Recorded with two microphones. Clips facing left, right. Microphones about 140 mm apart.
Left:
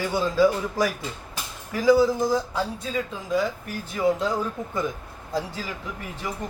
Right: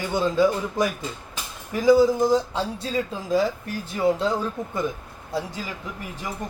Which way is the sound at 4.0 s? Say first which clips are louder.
Right 1 dB; 25° right (ahead or behind).